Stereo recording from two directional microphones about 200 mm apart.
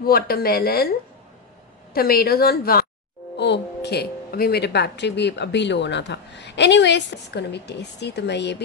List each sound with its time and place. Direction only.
0.0 s a woman's voice: 50° left (ahead or behind)
2.0 s a woman's voice: 50° left (ahead or behind)